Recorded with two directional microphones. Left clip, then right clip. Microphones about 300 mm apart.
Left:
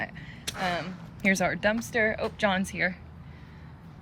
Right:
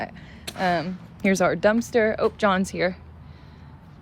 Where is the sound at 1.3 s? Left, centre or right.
Right.